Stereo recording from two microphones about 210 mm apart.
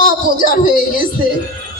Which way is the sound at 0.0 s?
40° left (ahead or behind).